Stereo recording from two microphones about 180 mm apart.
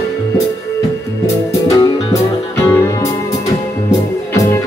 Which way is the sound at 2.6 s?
15° left (ahead or behind).